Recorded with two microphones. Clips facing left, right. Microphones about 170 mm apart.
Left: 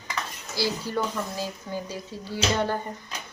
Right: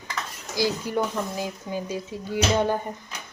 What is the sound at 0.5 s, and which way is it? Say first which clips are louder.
Speech: right 3 dB; 15° right (ahead or behind).